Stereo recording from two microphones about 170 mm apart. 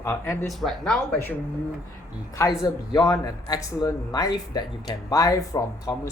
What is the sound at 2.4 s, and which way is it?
Speech, 20° left (ahead or behind).